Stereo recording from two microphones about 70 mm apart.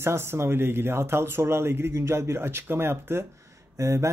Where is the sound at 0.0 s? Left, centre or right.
Right.